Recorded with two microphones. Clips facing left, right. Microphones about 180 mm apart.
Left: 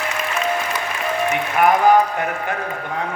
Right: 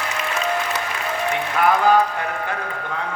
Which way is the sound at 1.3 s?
15° left (ahead or behind).